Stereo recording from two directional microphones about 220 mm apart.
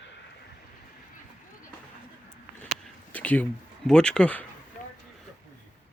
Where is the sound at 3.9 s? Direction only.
5° left (ahead or behind).